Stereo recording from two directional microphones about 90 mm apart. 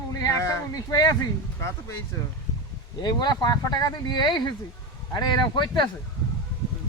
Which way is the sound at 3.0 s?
55° left (ahead or behind).